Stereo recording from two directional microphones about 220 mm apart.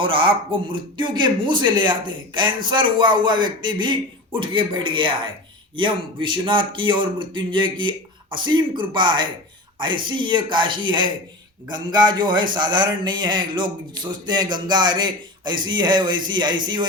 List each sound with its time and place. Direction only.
0.0 s a man's voice: 25° right (ahead or behind)